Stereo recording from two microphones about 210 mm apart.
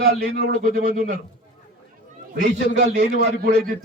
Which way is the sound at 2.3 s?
45° right (ahead or behind).